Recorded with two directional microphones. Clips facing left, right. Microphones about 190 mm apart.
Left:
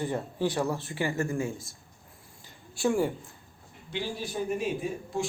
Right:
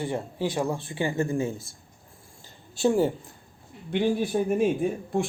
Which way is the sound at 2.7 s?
25° right (ahead or behind).